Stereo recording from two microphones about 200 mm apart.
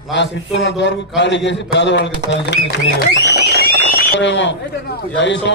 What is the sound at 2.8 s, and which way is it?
Speech, 55° right (ahead or behind).